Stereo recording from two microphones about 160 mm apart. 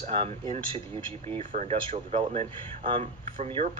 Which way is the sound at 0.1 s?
35° right (ahead or behind).